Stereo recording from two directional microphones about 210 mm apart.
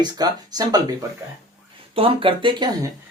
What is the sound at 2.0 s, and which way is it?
Speech, 25° right (ahead or behind).